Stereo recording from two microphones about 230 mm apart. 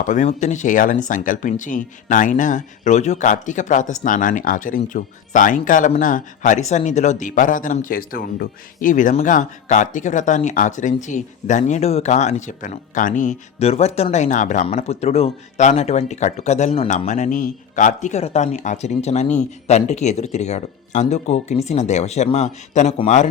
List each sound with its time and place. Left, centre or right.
0.0 s speech: left